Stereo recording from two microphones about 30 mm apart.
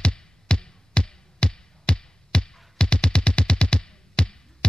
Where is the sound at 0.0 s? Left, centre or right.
Left.